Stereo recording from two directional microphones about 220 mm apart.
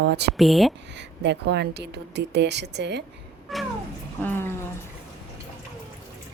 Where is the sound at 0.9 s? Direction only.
50° right (ahead or behind).